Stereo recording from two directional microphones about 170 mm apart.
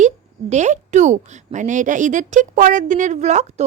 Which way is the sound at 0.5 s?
45° right (ahead or behind).